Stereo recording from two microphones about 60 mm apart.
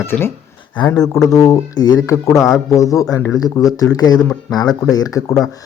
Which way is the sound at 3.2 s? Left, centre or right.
Left.